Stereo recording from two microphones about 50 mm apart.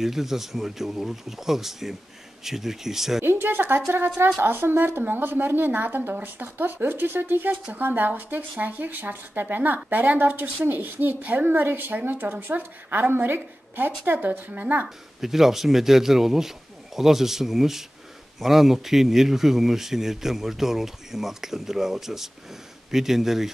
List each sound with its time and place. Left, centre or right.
0.0 s speech: centre
3.3 s a woman's voice: right
15.1 s speech: centre